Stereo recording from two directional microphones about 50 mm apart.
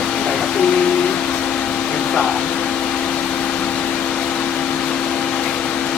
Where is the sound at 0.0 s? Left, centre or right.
Centre.